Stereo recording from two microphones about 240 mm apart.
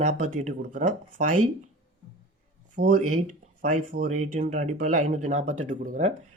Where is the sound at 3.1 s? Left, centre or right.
Right.